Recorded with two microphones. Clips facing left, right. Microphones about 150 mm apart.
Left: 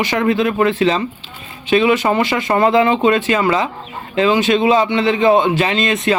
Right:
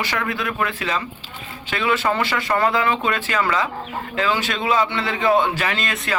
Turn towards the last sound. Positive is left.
turn(degrees=20)  # may be behind; listen again after turning